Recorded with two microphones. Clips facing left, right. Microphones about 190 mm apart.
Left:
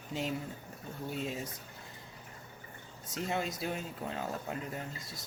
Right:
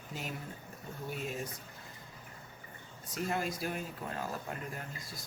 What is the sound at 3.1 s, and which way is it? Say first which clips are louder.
Speech: even; 25° left (ahead or behind).